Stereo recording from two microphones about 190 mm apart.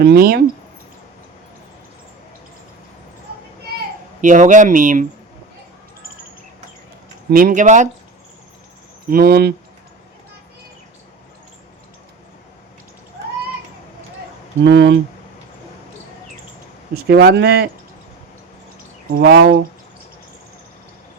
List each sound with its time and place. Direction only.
0.0 s speech: 55° right (ahead or behind)
4.2 s speech: 40° right (ahead or behind)
7.3 s speech: 50° right (ahead or behind)
9.0 s speech: 50° right (ahead or behind)
14.6 s speech: 70° right (ahead or behind)
16.9 s speech: 55° right (ahead or behind)
19.2 s speech: 60° right (ahead or behind)